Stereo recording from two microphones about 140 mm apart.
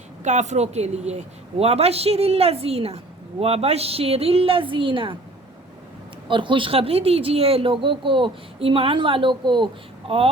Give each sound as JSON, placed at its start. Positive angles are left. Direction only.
{"t": 0.3, "sound": "a woman's voice", "side_deg": -55}
{"t": 6.2, "sound": "speech", "side_deg": -35}